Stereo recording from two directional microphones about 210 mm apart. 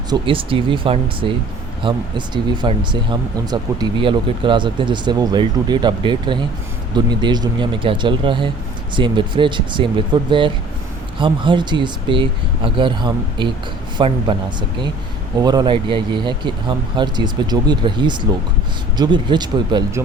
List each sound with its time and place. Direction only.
0.1 s speech: 25° right (ahead or behind)
15.4 s speech: 20° right (ahead or behind)